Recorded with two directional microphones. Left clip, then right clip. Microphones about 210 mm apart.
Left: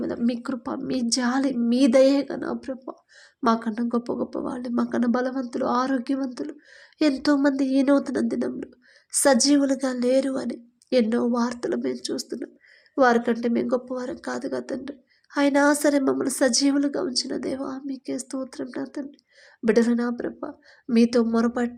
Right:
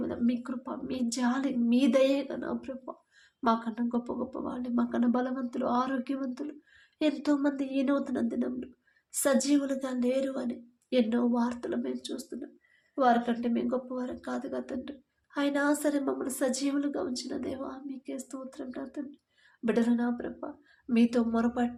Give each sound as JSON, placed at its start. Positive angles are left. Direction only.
{"t": 0.0, "sound": "a woman's voice", "side_deg": 40}